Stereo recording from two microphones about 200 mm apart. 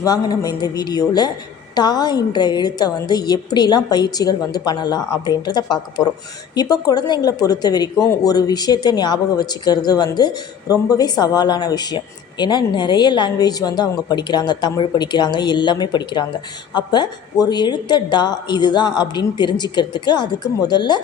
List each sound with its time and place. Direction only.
0.0 s speech: 20° left (ahead or behind)